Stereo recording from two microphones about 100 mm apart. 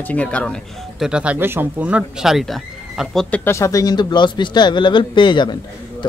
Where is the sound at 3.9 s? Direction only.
50° left (ahead or behind).